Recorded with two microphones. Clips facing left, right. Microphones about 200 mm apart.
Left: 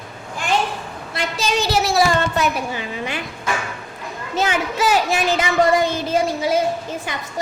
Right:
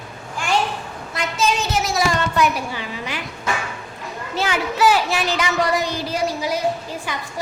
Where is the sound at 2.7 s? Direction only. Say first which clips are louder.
Left 3 dB; 20° left (ahead or behind).